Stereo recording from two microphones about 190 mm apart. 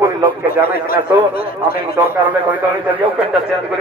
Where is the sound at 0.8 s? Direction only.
50° left (ahead or behind).